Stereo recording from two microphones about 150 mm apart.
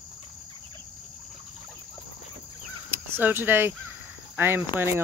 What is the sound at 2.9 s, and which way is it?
Speech, 15° right (ahead or behind).